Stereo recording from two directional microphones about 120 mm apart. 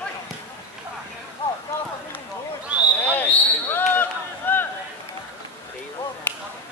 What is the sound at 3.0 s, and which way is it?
Basketball bounce, 15° left (ahead or behind).